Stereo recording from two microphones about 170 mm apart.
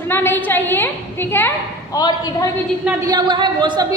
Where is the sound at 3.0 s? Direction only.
25° right (ahead or behind).